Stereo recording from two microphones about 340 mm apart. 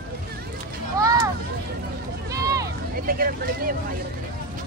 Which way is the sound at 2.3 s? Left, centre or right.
Centre.